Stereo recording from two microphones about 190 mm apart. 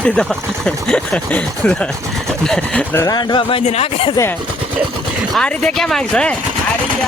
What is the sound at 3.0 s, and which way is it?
Speech, 20° left (ahead or behind).